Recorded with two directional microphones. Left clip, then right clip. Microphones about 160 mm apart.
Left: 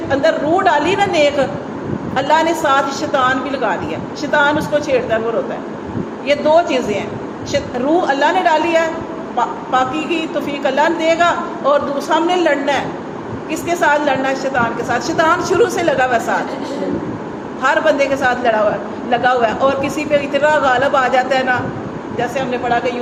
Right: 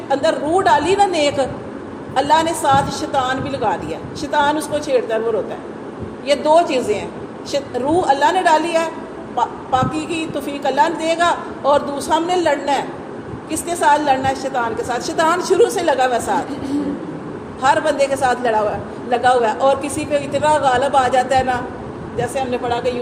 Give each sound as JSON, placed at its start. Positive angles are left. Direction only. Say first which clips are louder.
{"t": 0.1, "sound": "a man's voice", "louder": "left 2 dB", "side_deg": -50}
{"t": 6.2, "sound": "a man's voice", "louder": "left 1 dB", "side_deg": -50}
{"t": 8.0, "sound": "a man's voice", "louder": "right 1 dB", "side_deg": -50}
{"t": 17.6, "sound": "a man's voice", "louder": "left 1 dB", "side_deg": -45}